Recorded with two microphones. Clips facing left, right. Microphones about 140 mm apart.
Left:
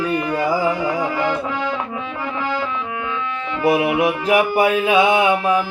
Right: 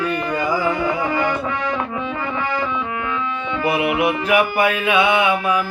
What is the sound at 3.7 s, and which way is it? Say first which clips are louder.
Mantra: left 2 dB; 35° left (ahead or behind).